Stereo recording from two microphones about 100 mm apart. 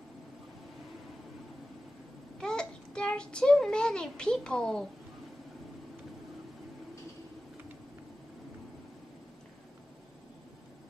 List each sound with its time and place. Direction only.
2.4 s a child's voice: 10° left (ahead or behind)